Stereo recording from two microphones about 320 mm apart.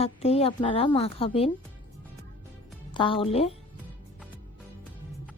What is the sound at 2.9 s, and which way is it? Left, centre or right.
Speech, centre.